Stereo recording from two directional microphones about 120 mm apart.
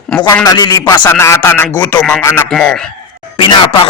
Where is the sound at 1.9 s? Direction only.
10° left (ahead or behind).